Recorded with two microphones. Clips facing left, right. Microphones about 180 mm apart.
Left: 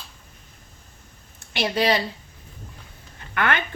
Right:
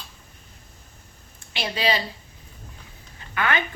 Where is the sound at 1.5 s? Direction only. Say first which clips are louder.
Left 3 dB; 55° left (ahead or behind).